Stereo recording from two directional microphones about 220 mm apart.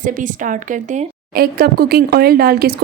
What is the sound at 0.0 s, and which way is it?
Speech, 35° right (ahead or behind).